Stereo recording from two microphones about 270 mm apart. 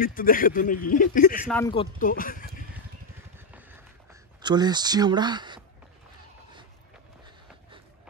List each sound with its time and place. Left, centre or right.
0.0 s speech: left
1.6 s speech: centre
2.0 s speech: left
3.3 s a sound: centre